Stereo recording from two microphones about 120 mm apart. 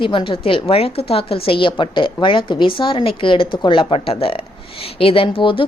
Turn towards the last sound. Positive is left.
turn(degrees=45)  # may be behind; listen again after turning